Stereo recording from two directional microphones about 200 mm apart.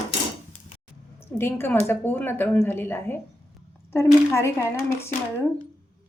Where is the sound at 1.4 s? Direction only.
10° left (ahead or behind).